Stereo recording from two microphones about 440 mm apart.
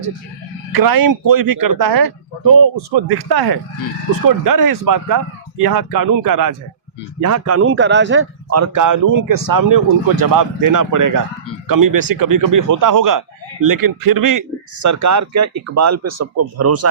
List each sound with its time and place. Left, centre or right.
0.7 s speech: right